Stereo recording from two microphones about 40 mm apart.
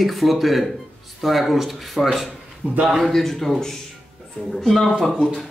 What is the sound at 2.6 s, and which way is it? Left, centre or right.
Speech, right.